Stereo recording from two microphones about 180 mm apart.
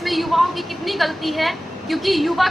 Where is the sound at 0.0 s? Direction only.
Centre (ahead or behind).